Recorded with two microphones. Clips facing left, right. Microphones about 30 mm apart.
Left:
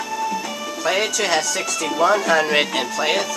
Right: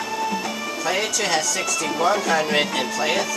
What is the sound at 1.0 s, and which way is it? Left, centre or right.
Speech, centre.